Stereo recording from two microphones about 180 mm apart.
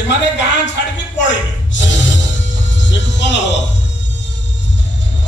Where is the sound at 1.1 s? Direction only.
85° left.